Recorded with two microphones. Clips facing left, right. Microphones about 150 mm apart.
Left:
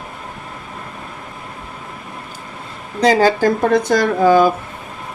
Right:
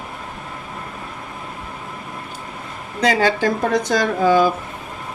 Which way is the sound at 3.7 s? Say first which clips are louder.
Left 4 dB; 55° left (ahead or behind).